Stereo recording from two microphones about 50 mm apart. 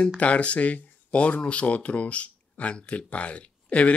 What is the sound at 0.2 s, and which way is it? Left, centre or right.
Speech, left.